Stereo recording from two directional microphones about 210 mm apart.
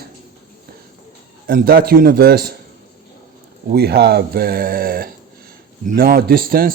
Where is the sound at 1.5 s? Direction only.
45° right (ahead or behind).